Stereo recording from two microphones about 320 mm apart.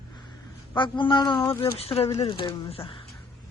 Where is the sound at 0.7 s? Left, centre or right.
Centre.